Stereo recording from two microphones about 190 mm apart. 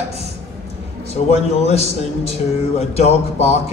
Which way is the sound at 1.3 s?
35° left (ahead or behind).